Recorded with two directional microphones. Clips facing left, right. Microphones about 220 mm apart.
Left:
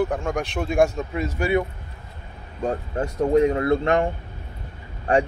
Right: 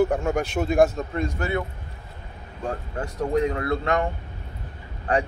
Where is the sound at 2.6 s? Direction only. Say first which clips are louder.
Left 5 dB; 25° left (ahead or behind).